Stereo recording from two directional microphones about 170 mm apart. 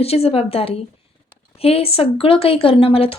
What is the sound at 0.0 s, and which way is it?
Speech, 35° left (ahead or behind).